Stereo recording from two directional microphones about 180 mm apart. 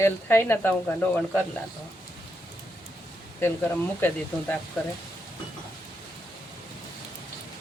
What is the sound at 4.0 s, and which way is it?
Speech, 10° left (ahead or behind).